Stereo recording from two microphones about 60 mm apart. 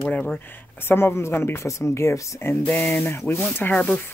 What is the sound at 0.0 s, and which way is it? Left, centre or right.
Speech, centre.